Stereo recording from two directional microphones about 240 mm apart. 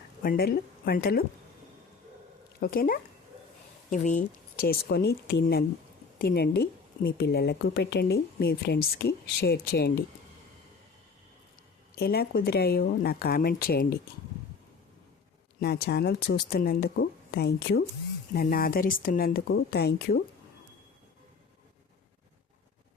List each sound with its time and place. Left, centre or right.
0.2 s speech: left
2.6 s a woman's voice: left
11.9 s a woman's voice: left
15.6 s a woman's voice: left